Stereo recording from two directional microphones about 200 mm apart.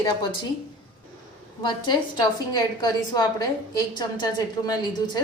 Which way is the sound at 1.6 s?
20° left (ahead or behind).